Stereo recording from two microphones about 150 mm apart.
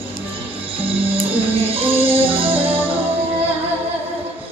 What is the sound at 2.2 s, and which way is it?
Music, 35° right (ahead or behind).